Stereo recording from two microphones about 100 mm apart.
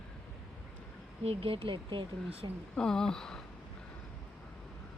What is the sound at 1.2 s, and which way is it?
Speech, 75° right (ahead or behind).